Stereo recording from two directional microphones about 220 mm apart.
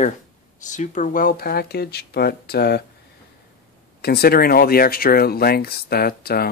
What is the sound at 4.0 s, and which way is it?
Speech, 45° left (ahead or behind).